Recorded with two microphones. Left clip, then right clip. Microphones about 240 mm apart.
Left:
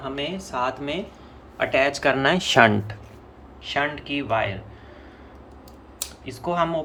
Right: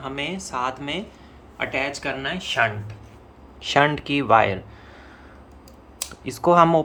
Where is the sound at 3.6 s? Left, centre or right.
Right.